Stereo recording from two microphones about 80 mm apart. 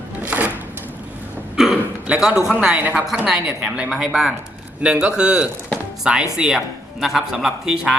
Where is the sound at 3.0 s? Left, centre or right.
Centre.